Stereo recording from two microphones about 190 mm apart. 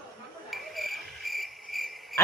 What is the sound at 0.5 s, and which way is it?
Cricket, centre (ahead or behind).